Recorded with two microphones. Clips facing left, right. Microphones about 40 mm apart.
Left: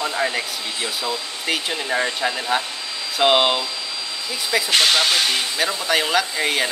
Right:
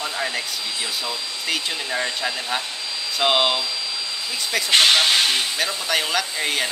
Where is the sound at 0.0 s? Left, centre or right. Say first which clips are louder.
Left 4 dB; centre.